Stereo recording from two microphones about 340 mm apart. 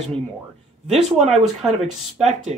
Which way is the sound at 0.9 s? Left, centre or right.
Centre.